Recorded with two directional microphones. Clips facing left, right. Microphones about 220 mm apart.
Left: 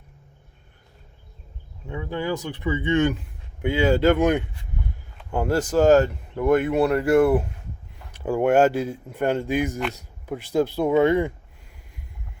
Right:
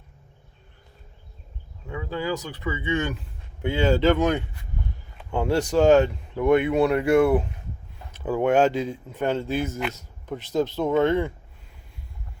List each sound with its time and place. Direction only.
1.9 s speech: 20° left (ahead or behind)